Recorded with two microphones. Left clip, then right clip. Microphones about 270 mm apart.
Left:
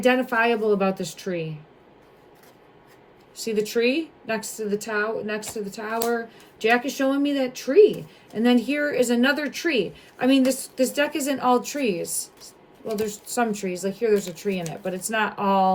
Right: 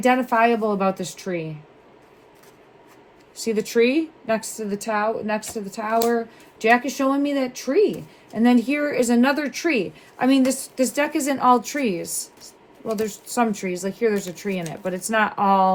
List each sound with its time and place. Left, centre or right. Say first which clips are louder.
0.0 s speech: right 2 dB; centre
3.3 s speech: right 3 dB; right